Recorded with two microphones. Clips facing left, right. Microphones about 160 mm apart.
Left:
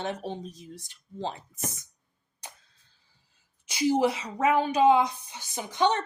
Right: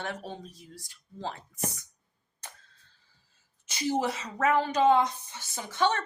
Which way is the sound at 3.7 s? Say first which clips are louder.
Left 5 dB; 10° left (ahead or behind).